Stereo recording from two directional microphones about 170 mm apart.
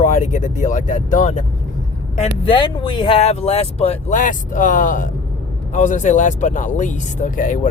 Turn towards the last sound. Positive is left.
turn(degrees=50)  # may be behind; listen again after turning